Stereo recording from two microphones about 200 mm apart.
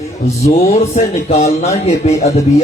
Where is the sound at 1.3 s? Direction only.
30° left (ahead or behind).